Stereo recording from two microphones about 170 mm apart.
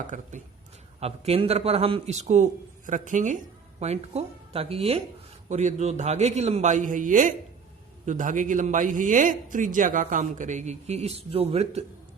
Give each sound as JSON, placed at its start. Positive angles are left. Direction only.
{"t": 0.1, "sound": "a man's voice", "side_deg": -45}